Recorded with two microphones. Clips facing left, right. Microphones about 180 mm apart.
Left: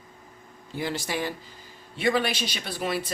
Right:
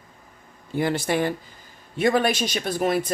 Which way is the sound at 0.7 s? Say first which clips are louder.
Right 7 dB; 55° right (ahead or behind).